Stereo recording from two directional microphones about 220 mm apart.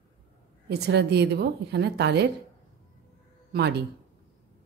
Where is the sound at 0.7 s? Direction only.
50° right (ahead or behind).